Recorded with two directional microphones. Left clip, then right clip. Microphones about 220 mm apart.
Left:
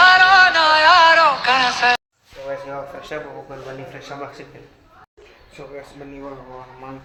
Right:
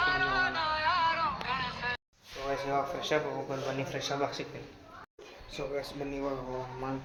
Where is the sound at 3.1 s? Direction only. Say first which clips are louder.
Even; 20° right (ahead or behind).